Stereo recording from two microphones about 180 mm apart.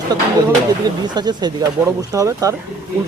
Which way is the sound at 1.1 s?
25° right (ahead or behind).